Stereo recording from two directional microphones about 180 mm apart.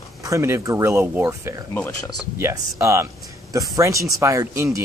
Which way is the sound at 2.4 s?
15° right (ahead or behind).